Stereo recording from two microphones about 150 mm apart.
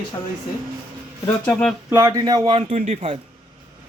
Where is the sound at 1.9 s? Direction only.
20° right (ahead or behind); by 3.2 s 40° right (ahead or behind).